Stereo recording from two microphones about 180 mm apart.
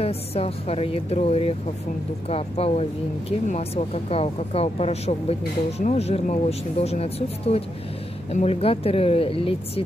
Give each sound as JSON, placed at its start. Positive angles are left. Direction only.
{"t": 0.0, "sound": "speech", "side_deg": 35}